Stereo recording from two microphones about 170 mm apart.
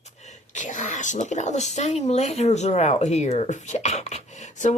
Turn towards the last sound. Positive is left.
turn(degrees=45)  # may be behind; listen again after turning